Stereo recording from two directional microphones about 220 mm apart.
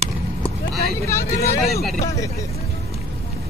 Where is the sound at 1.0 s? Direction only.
15° left (ahead or behind).